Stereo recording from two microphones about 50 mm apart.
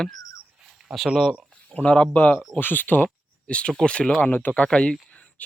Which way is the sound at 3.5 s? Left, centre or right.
Centre.